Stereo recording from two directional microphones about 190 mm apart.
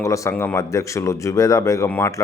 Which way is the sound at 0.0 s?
15° left (ahead or behind).